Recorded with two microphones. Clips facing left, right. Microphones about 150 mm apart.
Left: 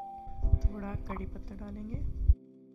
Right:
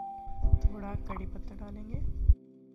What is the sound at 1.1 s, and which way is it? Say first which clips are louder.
Speech: left 1 dB; 25° right (ahead or behind).